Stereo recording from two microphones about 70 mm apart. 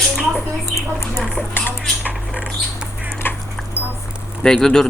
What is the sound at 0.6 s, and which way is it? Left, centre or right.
Speech, left.